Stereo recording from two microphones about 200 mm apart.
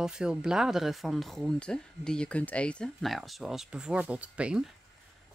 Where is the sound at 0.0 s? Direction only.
5° right (ahead or behind).